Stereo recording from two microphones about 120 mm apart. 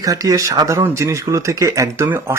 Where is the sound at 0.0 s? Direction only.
30° right (ahead or behind).